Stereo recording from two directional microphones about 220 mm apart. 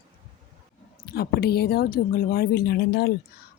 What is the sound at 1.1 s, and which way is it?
Speech, 45° left (ahead or behind).